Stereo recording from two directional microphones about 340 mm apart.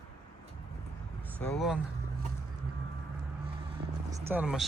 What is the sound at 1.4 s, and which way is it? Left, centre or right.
Speech, centre.